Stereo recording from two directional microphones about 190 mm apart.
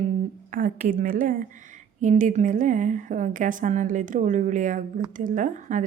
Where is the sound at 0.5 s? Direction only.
45° right (ahead or behind).